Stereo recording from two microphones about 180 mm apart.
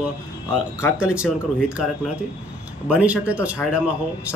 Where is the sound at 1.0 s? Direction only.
5° right (ahead or behind).